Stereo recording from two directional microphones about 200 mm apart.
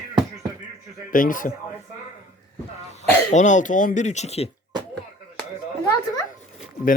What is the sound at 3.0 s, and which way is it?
Speech, 35° left (ahead or behind).